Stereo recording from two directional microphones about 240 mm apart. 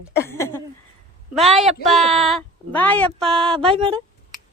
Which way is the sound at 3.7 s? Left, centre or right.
Right.